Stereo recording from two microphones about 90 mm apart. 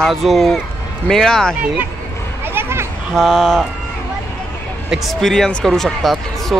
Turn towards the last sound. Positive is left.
turn(degrees=5)  # may be behind; listen again after turning